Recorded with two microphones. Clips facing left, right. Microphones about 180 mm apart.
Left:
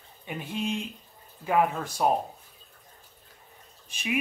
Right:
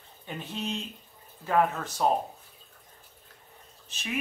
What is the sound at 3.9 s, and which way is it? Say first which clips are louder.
Speech: left 5 dB; 10° left (ahead or behind).